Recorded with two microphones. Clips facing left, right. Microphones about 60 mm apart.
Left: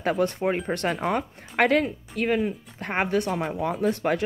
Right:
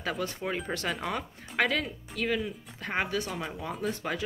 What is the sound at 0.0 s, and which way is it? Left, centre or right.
Speech, left.